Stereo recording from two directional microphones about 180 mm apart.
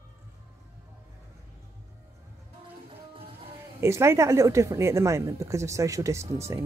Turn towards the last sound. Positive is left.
turn(degrees=-15)  # may be behind; listen again after turning